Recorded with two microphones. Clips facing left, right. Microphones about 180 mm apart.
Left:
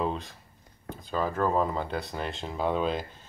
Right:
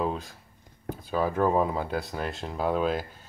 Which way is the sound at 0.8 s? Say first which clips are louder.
Right 3 dB; 10° right (ahead or behind).